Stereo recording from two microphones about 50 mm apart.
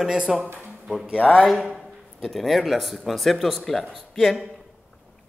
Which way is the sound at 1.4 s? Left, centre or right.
Centre.